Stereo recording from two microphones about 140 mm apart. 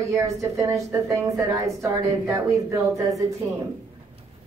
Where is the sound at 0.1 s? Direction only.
20° right (ahead or behind).